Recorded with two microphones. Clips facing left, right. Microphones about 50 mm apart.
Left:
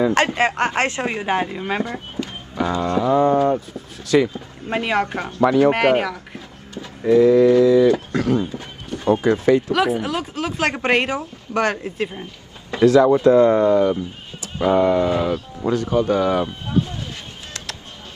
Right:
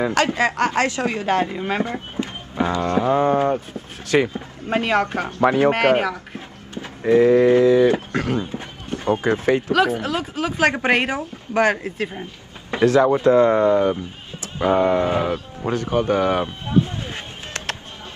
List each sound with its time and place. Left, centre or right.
0.1 s speech: left; by 1.5 s centre
1.5 s speech: centre
1.9 s music: right
2.8 s speech: right
4.8 s speech: centre
5.4 s speech: right
5.7 s speech: centre
6.7 s a sound: right
7.2 s speech: right
9.7 s speech: centre
13.0 s speech: right
16.8 s a sound: right